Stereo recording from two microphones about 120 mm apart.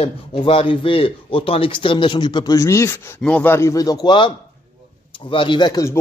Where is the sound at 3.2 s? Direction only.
15° left (ahead or behind); by 4.3 s 35° left (ahead or behind).